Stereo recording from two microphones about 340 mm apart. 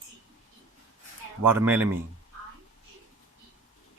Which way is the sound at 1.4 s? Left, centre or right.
Centre.